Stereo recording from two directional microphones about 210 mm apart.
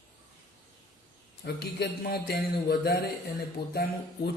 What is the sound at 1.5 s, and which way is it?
A man's voice, 50° left (ahead or behind).